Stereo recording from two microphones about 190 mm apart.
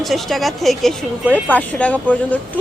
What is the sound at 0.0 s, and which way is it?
A woman's voice, centre (ahead or behind).